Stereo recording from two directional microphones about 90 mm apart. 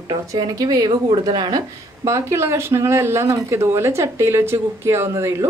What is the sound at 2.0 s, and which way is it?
A woman's voice, 30° right (ahead or behind).